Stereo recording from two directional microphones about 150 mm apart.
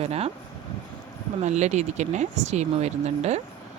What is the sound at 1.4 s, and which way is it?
Speech, 50° right (ahead or behind).